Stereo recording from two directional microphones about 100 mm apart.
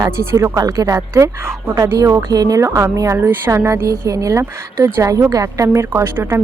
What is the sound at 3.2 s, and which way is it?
A woman's voice, 20° right (ahead or behind).